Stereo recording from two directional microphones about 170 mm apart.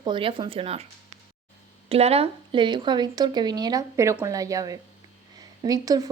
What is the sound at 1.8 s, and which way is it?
Speech, 35° right (ahead or behind).